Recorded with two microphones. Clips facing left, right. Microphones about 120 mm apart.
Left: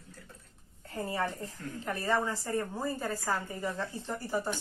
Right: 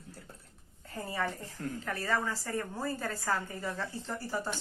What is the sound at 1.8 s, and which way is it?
A woman's voice, 20° left (ahead or behind).